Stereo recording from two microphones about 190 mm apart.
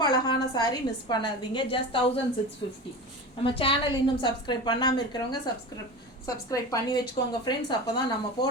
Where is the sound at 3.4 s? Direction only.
30° left (ahead or behind).